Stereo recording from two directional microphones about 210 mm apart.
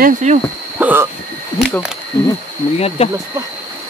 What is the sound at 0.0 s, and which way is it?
Speech, 35° right (ahead or behind).